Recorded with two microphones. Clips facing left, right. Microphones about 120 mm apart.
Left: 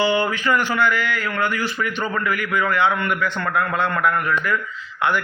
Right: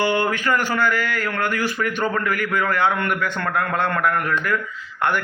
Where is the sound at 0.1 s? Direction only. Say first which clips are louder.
Left 1 dB; 50° right (ahead or behind).